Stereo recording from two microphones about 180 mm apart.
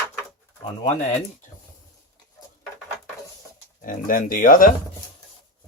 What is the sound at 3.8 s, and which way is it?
Speech, 50° left (ahead or behind).